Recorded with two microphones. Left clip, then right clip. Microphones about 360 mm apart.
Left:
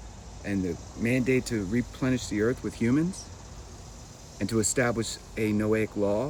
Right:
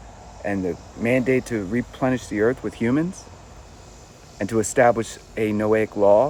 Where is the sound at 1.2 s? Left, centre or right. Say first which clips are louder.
Right 5 dB; right.